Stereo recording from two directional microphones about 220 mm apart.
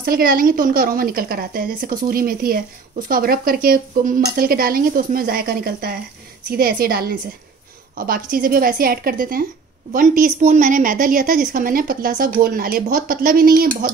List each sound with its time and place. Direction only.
0.1 s a woman's voice: 40° right (ahead or behind)
3.1 s stir: 40° right (ahead or behind)
8.0 s a woman's voice: 40° right (ahead or behind)